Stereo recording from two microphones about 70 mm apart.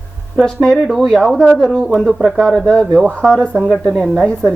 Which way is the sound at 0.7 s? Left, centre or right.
Centre.